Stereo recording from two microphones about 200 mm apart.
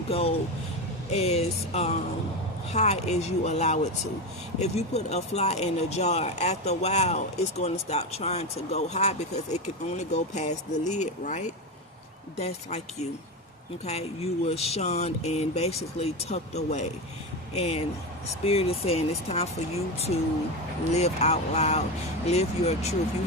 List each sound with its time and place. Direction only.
0.1 s speech: 30° left (ahead or behind)